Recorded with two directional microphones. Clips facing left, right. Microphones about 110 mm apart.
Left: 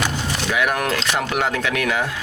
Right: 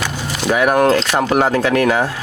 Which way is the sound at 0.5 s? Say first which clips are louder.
Right 9 dB; 35° right (ahead or behind).